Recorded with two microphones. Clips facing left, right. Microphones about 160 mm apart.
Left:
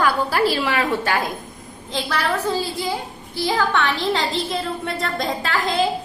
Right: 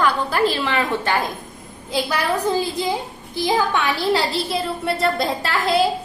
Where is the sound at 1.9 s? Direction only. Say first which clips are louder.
Right 2 dB; 10° right (ahead or behind).